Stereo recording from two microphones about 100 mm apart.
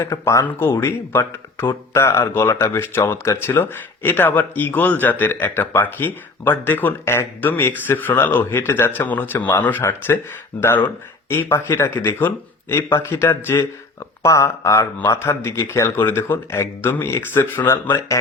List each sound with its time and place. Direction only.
0.0 s speech: 30° left (ahead or behind)